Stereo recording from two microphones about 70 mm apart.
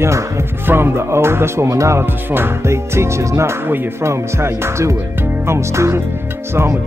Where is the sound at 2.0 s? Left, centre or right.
Right.